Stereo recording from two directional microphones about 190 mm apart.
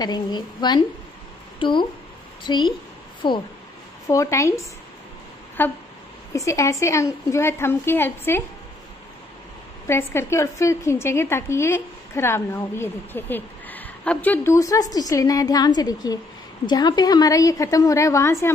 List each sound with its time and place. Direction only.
0.0 s a woman's voice: 20° left (ahead or behind)
9.8 s a woman's voice: 15° left (ahead or behind)